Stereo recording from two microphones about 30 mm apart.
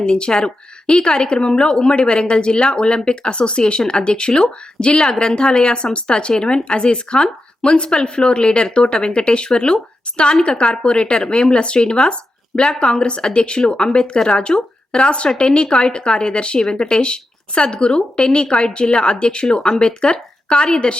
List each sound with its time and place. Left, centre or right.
0.0 s a woman's voice: left
3.8 s a woman's voice: left
19.5 s a woman's voice: left
20.0 s speech: left